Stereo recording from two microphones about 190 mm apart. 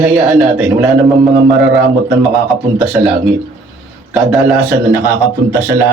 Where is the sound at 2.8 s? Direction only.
10° right (ahead or behind).